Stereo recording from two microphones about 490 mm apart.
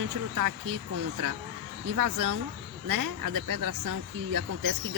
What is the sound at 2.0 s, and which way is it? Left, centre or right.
Speech, right.